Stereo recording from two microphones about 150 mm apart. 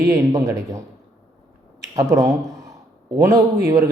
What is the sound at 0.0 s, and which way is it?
Speech, 20° right (ahead or behind).